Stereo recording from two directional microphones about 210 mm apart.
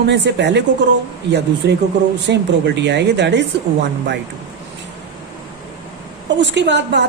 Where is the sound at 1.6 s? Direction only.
55° right (ahead or behind).